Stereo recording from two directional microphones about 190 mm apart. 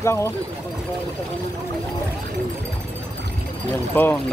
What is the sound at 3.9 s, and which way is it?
Speech, 10° left (ahead or behind).